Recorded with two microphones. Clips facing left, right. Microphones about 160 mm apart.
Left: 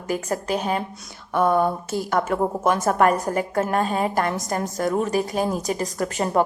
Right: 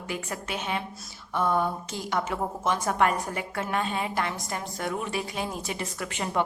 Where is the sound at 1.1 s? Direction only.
55° left (ahead or behind).